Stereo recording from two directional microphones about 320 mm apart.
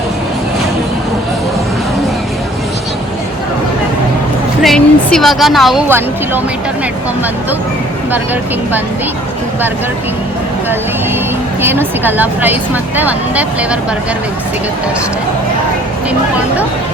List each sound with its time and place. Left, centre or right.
4.6 s speech: centre
11.6 s speech: centre